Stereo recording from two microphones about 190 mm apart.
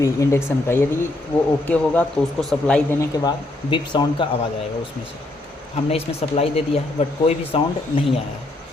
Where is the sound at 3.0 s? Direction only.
20° left (ahead or behind).